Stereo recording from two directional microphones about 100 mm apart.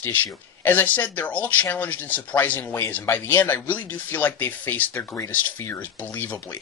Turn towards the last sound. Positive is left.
turn(degrees=20)  # may be behind; listen again after turning